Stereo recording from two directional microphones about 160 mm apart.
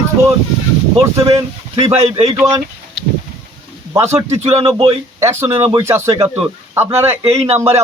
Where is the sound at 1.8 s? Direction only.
35° right (ahead or behind).